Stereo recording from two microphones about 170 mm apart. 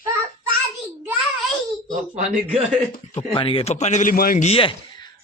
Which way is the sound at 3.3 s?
30° left (ahead or behind).